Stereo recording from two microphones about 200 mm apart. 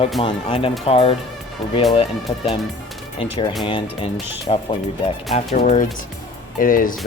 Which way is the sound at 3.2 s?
25° left (ahead or behind).